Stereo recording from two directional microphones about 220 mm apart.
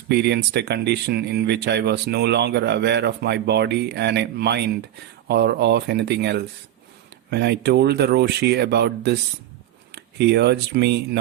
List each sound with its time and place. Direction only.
0.1 s speech: 50° right (ahead or behind)